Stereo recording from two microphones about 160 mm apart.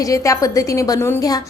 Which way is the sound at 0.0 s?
20° left (ahead or behind).